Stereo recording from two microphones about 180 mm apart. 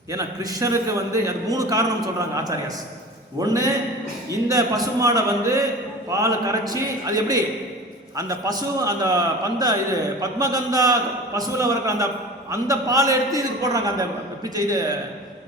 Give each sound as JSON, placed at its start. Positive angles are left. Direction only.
{"t": 0.1, "sound": "a man's voice", "side_deg": -20}